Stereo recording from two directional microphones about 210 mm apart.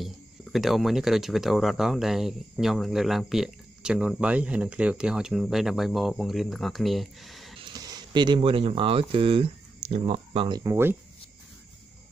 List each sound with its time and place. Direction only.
0.0 s speech: centre (ahead or behind)
7.7 s speech: 20° right (ahead or behind)